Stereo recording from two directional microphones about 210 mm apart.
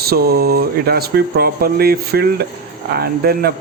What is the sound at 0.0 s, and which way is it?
Speech, 45° right (ahead or behind).